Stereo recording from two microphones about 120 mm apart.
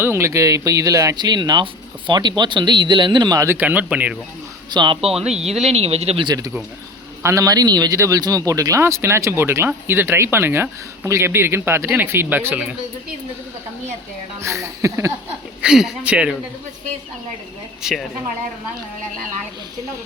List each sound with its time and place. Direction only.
0.0 s speech: 20° right (ahead or behind); by 3.4 s 35° right (ahead or behind)
3.4 s speech: 15° right (ahead or behind)
4.7 s speech: 40° right (ahead or behind)
5.0 s speech: 55° right (ahead or behind)
6.2 s speech: 30° right (ahead or behind)
14.4 s speech: 25° right (ahead or behind)
15.6 s speech: 5° right (ahead or behind)
17.8 s speech: 5° right (ahead or behind)